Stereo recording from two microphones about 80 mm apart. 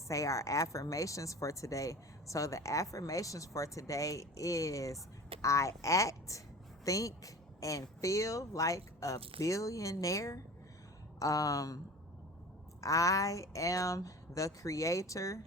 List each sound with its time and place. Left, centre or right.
0.1 s speech: left
12.8 s speech: left